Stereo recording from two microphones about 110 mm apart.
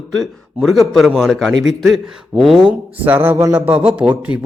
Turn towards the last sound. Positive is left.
turn(degrees=-10)  # may be behind; listen again after turning